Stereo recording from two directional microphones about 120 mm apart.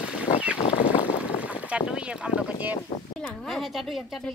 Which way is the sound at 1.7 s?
10° right (ahead or behind).